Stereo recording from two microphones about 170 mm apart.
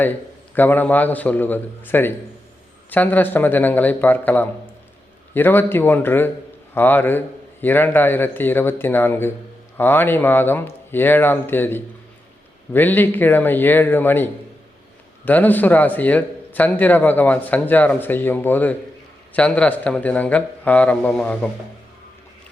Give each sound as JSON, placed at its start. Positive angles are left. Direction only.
{"t": 0.0, "sound": "a man's voice", "side_deg": 10}